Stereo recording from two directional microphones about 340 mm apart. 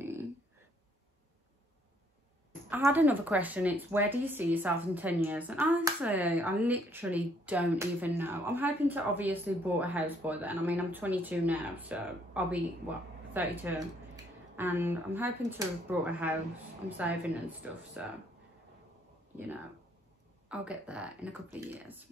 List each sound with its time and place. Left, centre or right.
2.7 s speech: centre
20.4 s speech: centre